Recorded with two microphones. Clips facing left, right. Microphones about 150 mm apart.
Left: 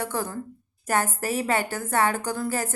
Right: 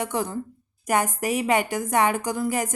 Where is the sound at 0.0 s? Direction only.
15° right (ahead or behind).